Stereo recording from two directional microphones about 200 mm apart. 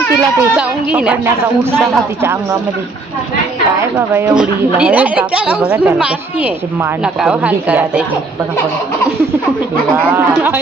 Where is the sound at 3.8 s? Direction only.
15° right (ahead or behind).